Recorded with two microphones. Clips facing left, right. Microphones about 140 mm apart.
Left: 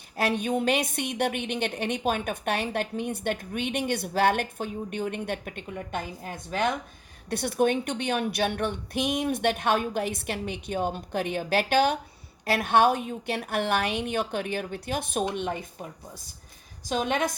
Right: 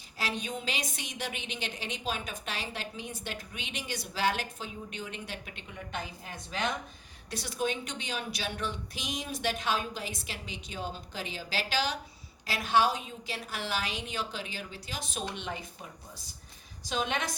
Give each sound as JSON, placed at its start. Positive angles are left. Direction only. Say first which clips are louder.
{"t": 0.2, "sound": "a woman's voice", "louder": "left 10 dB", "side_deg": 55}
{"t": 16.8, "sound": "a woman's voice", "louder": "left 6 dB", "side_deg": 50}